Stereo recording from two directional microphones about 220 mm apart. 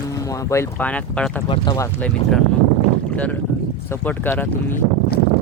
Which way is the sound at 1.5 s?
20° left (ahead or behind).